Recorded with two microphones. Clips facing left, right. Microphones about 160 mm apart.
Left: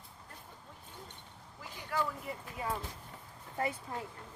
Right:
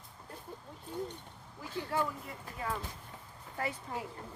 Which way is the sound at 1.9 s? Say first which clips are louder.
Right 1 dB; 25° right (ahead or behind).